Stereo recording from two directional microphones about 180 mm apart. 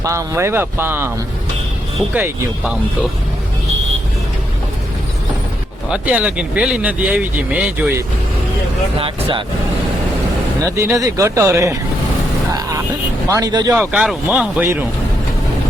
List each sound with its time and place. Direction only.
0.0 s speech: 15° right (ahead or behind)
2.1 s speech: 10° right (ahead or behind)
5.9 s speech: 5° right (ahead or behind)
9.0 s speech: 30° right (ahead or behind)
10.7 s speech: 15° right (ahead or behind)
12.5 s vehicle: 20° right (ahead or behind)
13.2 s speech: 20° right (ahead or behind)
13.7 s speech: 5° right (ahead or behind)